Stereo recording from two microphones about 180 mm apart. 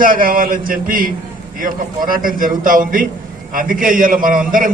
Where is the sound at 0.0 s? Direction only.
50° right (ahead or behind).